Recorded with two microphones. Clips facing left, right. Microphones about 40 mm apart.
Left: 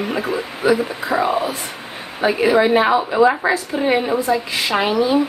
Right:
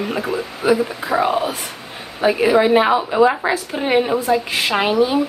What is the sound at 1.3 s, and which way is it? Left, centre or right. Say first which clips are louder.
A woman's voice: even; centre.